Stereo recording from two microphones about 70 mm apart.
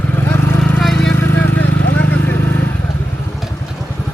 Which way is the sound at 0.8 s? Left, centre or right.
Centre.